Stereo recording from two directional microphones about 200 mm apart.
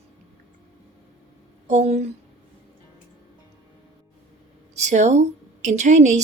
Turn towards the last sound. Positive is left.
turn(degrees=-35)  # may be behind; listen again after turning